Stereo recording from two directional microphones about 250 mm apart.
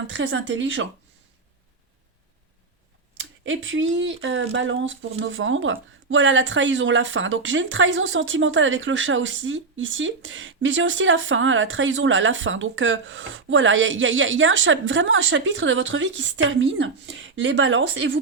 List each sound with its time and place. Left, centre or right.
0.1 s speech: right
3.2 s speech: right